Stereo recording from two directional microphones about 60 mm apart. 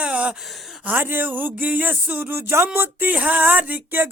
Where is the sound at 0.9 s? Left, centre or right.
Right.